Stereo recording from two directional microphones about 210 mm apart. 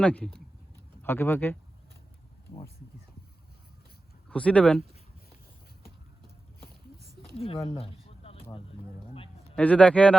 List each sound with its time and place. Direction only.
0.0 s speech: 5° left (ahead or behind)
4.3 s speech: 5° left (ahead or behind)
7.3 s speech: 25° left (ahead or behind)
8.2 s a sound: 30° left (ahead or behind)
9.6 s speech: 5° left (ahead or behind)